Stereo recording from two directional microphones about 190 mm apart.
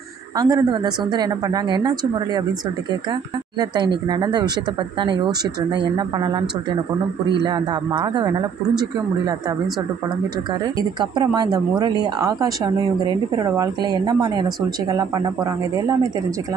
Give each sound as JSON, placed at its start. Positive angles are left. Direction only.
{"t": 0.4, "sound": "speech", "side_deg": -20}
{"t": 3.5, "sound": "speech", "side_deg": -20}
{"t": 10.8, "sound": "speech", "side_deg": -20}